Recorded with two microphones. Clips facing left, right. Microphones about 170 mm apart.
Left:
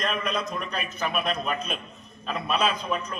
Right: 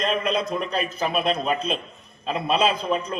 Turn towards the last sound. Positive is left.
turn(degrees=-30)  # may be behind; listen again after turning